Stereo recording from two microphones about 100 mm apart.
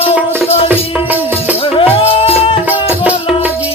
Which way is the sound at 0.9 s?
15° right (ahead or behind).